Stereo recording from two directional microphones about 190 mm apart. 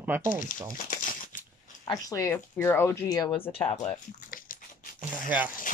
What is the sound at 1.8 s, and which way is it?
Speech, 20° left (ahead or behind).